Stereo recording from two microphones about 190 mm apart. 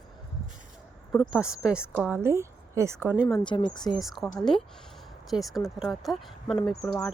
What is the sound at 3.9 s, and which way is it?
Speech, centre (ahead or behind).